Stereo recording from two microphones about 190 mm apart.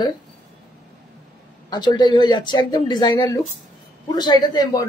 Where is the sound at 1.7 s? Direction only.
20° left (ahead or behind).